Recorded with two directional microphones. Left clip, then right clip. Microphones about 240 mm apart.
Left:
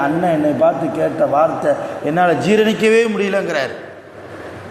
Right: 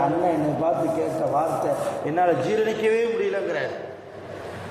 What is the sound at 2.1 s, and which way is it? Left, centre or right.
A man's voice, left.